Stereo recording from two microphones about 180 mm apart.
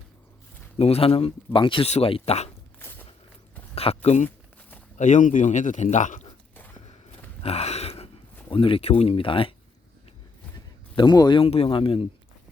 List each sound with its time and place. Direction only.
0.8 s speech: 35° left (ahead or behind)
2.7 s a sound: 10° left (ahead or behind)
3.8 s a man's voice: 35° left (ahead or behind)
7.4 s a sound: 35° left (ahead or behind)
8.4 s speech: 30° left (ahead or behind)
10.9 s speech: 25° left (ahead or behind)